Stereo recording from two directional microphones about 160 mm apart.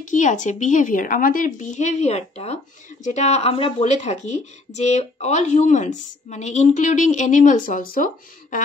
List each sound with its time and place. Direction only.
0.0 s speech: 50° left (ahead or behind)